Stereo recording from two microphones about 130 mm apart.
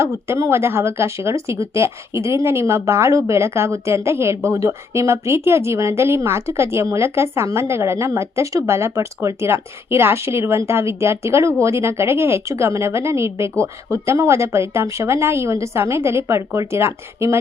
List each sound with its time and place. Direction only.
0.0 s speech: 20° right (ahead or behind)